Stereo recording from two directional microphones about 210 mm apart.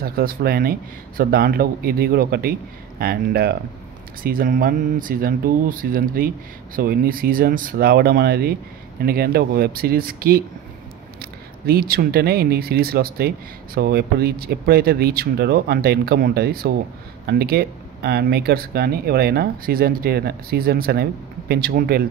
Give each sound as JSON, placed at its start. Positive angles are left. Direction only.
{"t": 0.0, "sound": "speech", "side_deg": -45}